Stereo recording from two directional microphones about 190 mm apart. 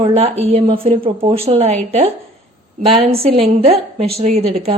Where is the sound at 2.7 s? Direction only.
30° right (ahead or behind).